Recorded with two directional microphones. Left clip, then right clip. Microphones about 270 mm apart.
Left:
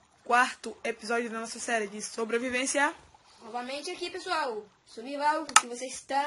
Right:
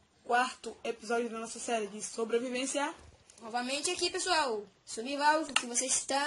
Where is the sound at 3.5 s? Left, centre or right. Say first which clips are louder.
Right 2 dB; right.